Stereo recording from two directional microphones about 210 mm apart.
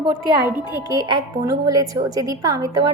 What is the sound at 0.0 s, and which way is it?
A woman's voice, 20° right (ahead or behind).